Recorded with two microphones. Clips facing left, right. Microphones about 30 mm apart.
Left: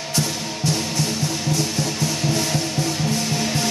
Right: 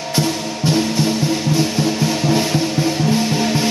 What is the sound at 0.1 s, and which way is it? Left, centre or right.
Music, right.